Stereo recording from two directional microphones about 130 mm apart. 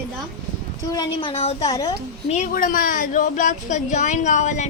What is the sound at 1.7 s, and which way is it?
Speech, 30° left (ahead or behind).